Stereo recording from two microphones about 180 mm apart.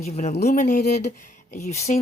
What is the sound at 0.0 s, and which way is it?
Speech, 40° left (ahead or behind).